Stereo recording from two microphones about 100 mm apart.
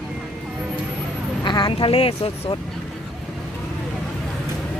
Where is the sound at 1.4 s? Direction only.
50° left (ahead or behind); by 2.5 s 75° left (ahead or behind).